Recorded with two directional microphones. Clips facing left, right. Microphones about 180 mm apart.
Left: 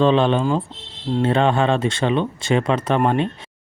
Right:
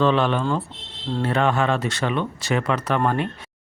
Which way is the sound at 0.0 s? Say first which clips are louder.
Left 3 dB; 25° left (ahead or behind).